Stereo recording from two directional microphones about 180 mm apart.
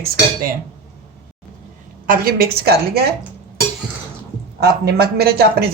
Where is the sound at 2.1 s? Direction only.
55° right (ahead or behind).